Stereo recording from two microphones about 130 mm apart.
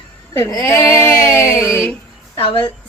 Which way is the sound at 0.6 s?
20° left (ahead or behind).